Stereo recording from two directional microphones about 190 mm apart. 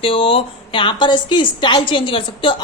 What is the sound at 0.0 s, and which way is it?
A woman's voice, 30° left (ahead or behind).